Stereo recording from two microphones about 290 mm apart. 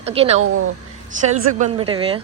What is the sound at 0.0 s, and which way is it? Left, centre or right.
A woman's voice, right.